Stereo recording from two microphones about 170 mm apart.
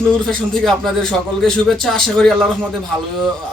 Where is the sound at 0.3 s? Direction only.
Centre (ahead or behind).